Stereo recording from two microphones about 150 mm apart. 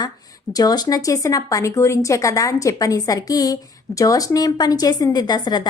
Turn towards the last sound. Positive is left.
turn(degrees=30)  # may be behind; listen again after turning